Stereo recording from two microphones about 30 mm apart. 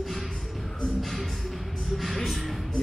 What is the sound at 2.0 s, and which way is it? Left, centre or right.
Music, centre.